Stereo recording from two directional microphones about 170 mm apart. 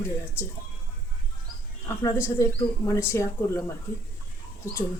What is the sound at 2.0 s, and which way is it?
Speech, 15° left (ahead or behind).